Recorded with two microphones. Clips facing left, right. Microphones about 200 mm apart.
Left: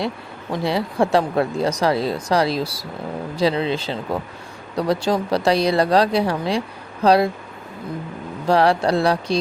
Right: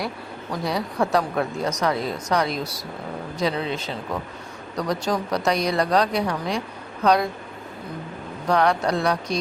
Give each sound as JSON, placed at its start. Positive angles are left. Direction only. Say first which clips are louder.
{"t": 0.5, "sound": "speech", "louder": "left 4 dB", "side_deg": 25}
{"t": 8.4, "sound": "speech", "louder": "left 4 dB", "side_deg": 30}